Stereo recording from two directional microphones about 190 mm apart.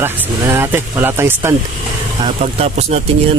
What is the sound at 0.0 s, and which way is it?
Speech, 10° right (ahead or behind).